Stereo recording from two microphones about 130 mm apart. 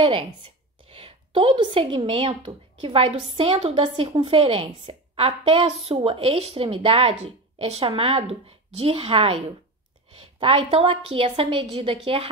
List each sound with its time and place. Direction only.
0.0 s speech: 45° right (ahead or behind)